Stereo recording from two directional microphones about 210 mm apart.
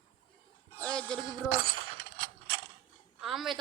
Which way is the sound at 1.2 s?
20° right (ahead or behind).